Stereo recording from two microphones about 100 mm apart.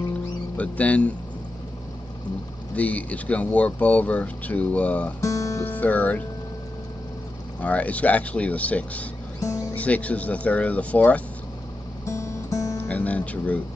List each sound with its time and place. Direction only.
0.6 s speech: 15° left (ahead or behind)
2.7 s speech: 15° left (ahead or behind)
5.2 s music: 30° left (ahead or behind)
5.7 s speech: 15° left (ahead or behind)
7.6 s speech: 15° left (ahead or behind)
12.1 s music: 30° left (ahead or behind)
12.7 s speech: 15° left (ahead or behind)